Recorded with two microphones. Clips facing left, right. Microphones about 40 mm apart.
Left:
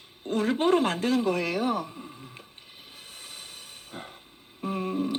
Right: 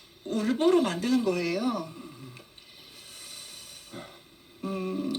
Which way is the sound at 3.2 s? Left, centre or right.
Left.